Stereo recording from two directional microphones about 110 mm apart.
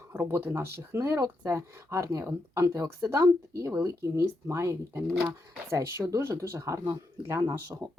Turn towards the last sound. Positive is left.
turn(degrees=-25)  # may be behind; listen again after turning